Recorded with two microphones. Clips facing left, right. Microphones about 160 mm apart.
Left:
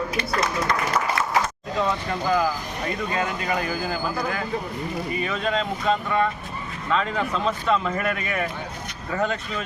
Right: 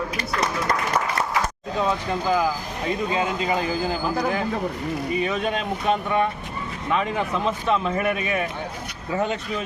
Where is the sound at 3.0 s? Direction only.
20° right (ahead or behind).